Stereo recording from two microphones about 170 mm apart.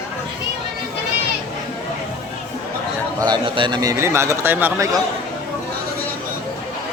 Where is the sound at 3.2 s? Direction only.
25° right (ahead or behind).